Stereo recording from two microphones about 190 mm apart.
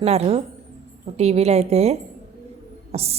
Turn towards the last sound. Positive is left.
turn(degrees=-35)  # may be behind; listen again after turning